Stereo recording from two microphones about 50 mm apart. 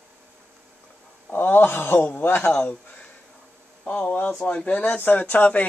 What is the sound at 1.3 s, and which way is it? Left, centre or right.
Speech, left.